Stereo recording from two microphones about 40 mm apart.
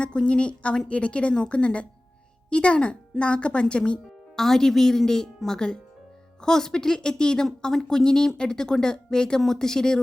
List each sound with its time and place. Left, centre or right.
0.0 s speech: left
4.4 s a woman's voice: centre